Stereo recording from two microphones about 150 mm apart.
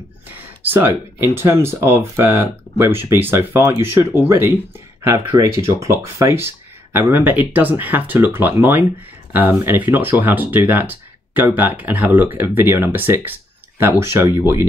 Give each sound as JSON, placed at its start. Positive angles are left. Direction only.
{"t": 0.7, "sound": "speech", "side_deg": -15}